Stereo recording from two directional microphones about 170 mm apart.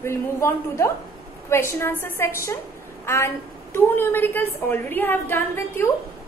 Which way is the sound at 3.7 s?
15° left (ahead or behind).